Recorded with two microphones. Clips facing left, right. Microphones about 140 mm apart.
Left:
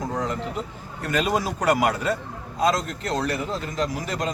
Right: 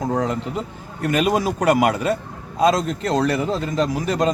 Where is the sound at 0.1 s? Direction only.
60° right (ahead or behind).